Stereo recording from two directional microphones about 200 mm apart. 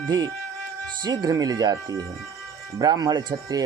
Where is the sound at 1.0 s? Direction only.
20° right (ahead or behind).